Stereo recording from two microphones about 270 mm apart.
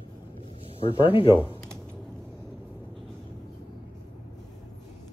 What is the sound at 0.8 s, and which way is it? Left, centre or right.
Speech, centre.